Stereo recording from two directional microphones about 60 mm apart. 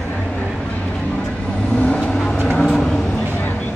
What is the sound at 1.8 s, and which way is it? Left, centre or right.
Vehicle, centre.